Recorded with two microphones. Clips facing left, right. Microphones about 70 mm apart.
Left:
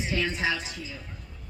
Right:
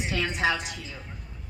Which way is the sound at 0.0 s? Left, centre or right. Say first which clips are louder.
Right 1 dB; right.